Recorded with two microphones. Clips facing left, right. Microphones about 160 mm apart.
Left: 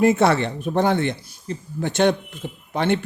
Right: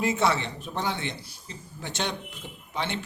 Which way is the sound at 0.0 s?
55° left (ahead or behind).